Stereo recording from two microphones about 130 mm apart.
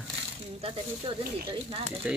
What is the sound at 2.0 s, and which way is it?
Speech, 10° right (ahead or behind).